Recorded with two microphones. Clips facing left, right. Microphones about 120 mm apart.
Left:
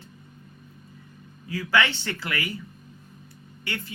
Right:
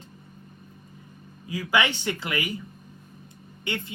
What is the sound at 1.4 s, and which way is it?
Speech, 15° right (ahead or behind).